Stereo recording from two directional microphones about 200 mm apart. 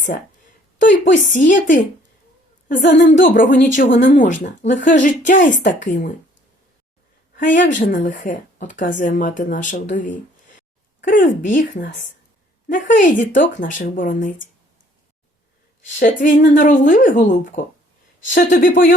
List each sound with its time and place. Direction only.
0.8 s speech: 40° left (ahead or behind)
7.3 s speech: 40° left (ahead or behind)
11.4 s speech: 40° left (ahead or behind)
16.0 s speech: 40° left (ahead or behind)